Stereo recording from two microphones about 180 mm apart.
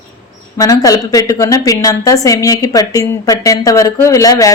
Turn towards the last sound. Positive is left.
turn(degrees=20)  # may be behind; listen again after turning